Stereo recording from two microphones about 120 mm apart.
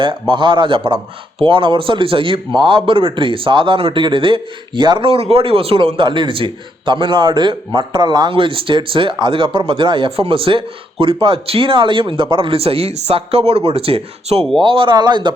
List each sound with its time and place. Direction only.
0.0 s a man's voice: 45° right (ahead or behind)